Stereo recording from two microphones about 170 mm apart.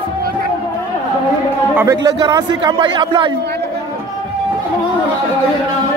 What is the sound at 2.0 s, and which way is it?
Speech, 25° right (ahead or behind).